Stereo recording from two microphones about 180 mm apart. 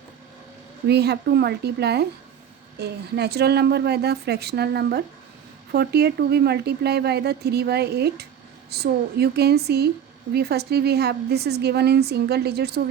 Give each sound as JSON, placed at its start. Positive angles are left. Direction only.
{"t": 0.9, "sound": "speech", "side_deg": -65}